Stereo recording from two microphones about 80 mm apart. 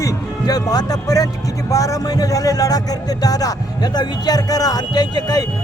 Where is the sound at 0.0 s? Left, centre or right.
Left.